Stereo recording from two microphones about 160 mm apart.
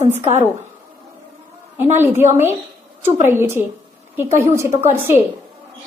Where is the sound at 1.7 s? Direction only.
15° right (ahead or behind).